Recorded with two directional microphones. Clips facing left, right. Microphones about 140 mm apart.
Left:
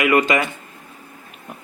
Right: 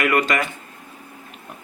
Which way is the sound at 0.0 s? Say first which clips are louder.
Left 3 dB; 15° left (ahead or behind).